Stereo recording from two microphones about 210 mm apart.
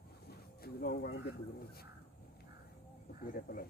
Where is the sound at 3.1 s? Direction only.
45° left (ahead or behind).